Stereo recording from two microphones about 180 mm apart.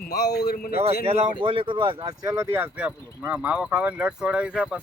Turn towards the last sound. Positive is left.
turn(degrees=-5)  # may be behind; listen again after turning